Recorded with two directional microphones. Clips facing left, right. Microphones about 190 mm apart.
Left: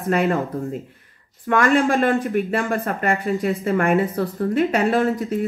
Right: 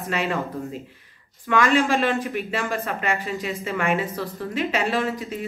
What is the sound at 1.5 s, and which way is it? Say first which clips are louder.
Speech: left 2 dB; 40° left (ahead or behind).